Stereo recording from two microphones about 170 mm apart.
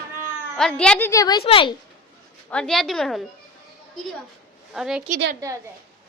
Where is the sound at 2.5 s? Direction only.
5° left (ahead or behind).